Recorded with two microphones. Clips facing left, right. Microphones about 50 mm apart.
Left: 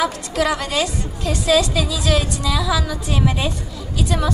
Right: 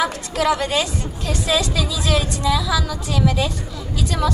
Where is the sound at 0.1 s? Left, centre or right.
Right.